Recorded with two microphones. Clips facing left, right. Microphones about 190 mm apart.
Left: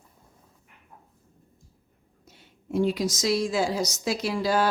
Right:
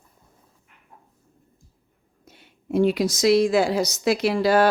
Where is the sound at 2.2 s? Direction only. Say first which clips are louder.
Right 3 dB; 65° right (ahead or behind).